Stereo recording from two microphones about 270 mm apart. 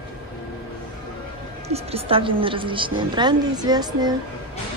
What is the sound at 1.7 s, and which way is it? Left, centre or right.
A woman's voice, right.